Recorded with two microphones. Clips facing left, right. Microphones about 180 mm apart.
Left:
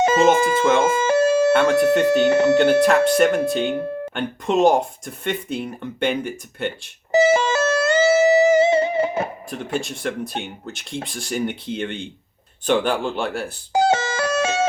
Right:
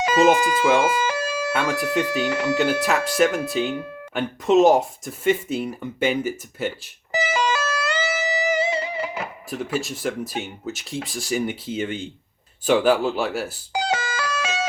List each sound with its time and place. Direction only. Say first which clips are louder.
0.0 s speech: left 2 dB; 25° left (ahead or behind)
2.6 s speech: left 6 dB; centre (ahead or behind)
3.8 s music: left 7 dB; 35° left (ahead or behind)
4.1 s speech: right 5 dB; centre (ahead or behind)
7.1 s music: left 7 dB; 25° left (ahead or behind)
9.8 s speech: even; 5° right (ahead or behind)
13.7 s music: left 6 dB; 25° left (ahead or behind)